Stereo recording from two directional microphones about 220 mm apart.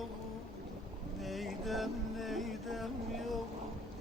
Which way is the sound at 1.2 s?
Centre (ahead or behind).